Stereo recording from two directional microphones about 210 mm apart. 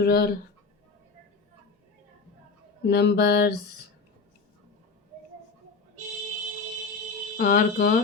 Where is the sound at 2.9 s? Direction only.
55° left (ahead or behind).